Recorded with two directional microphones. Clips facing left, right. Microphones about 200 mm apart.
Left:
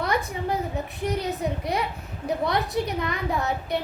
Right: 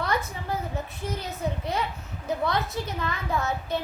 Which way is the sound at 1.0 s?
15° left (ahead or behind).